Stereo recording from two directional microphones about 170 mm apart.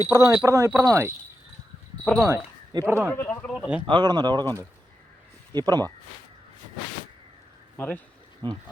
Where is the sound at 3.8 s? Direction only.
25° right (ahead or behind).